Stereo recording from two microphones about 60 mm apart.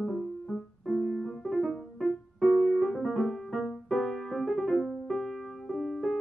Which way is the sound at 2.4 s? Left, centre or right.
Left.